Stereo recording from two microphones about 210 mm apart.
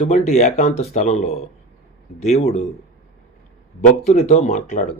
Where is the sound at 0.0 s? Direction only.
30° left (ahead or behind).